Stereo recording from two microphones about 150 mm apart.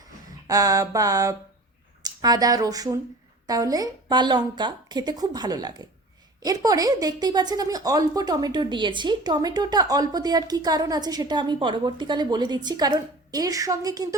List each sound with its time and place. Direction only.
0.4 s speech: 25° right (ahead or behind)